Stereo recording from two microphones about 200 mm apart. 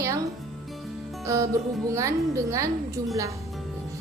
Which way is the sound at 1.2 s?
15° right (ahead or behind).